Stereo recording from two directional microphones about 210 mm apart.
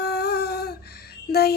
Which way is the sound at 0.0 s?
50° left (ahead or behind).